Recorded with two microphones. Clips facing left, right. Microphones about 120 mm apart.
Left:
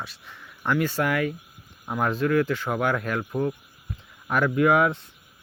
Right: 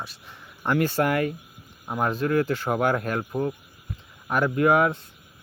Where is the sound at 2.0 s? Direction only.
30° right (ahead or behind).